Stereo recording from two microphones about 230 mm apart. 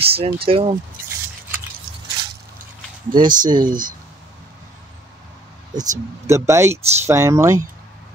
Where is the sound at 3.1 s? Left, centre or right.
Centre.